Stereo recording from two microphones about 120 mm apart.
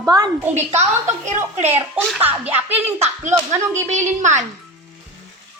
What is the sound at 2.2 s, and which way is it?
Speech, 15° right (ahead or behind).